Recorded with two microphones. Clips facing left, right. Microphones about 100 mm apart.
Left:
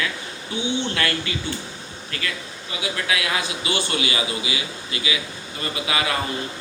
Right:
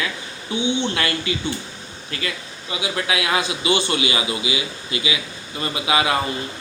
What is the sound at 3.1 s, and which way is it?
A man's voice, 20° right (ahead or behind).